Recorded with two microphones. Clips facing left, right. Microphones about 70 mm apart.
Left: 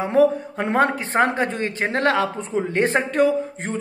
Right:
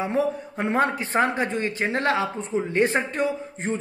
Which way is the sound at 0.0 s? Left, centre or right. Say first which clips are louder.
Left 7 dB; left.